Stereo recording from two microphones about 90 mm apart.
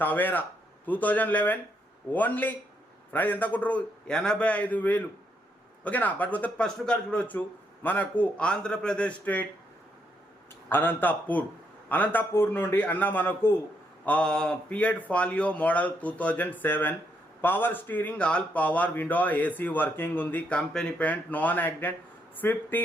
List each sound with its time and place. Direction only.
0.0 s speech: 20° left (ahead or behind)
10.7 s speech: 20° left (ahead or behind)